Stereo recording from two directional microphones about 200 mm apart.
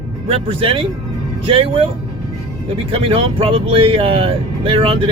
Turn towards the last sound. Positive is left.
turn(degrees=-25)  # may be behind; listen again after turning